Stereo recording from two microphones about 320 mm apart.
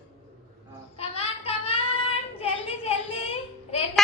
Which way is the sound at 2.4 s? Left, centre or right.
Centre.